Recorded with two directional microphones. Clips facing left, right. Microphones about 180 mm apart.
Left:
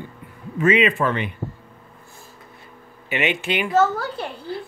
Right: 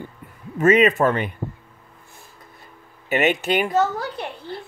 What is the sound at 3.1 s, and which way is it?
Speech, 40° right (ahead or behind).